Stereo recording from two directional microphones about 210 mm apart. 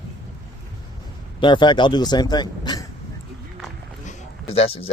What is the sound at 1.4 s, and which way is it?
Speech, 20° left (ahead or behind).